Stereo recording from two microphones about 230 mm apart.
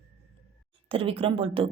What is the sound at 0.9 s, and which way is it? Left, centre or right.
Speech, right.